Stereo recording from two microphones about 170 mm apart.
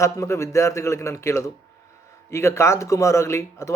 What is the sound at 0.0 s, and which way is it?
Speech, 15° left (ahead or behind).